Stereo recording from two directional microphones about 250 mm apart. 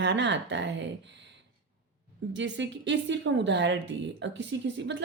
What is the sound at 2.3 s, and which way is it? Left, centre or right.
Speech, right.